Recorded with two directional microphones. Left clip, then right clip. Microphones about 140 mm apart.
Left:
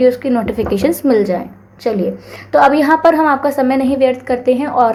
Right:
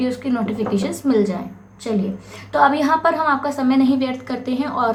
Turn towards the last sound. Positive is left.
turn(degrees=50)  # may be behind; listen again after turning